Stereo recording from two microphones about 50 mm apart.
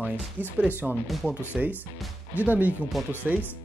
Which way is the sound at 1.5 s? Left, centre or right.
Centre.